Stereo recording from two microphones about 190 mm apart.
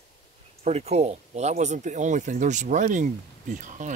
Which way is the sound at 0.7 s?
35° right (ahead or behind).